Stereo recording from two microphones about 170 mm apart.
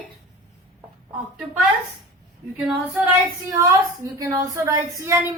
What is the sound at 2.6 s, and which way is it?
Speech, 5° right (ahead or behind).